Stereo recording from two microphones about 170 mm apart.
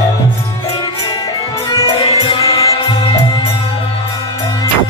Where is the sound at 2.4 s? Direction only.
20° left (ahead or behind).